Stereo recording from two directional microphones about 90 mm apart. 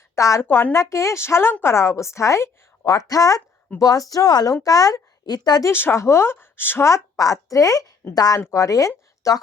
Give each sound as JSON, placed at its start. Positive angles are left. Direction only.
{"t": 0.2, "sound": "speech", "side_deg": 35}
{"t": 0.4, "sound": "speech", "side_deg": 25}
{"t": 5.6, "sound": "speech", "side_deg": 25}
{"t": 8.4, "sound": "speech", "side_deg": 30}